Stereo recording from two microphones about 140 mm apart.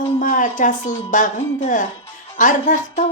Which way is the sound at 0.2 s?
65° left (ahead or behind).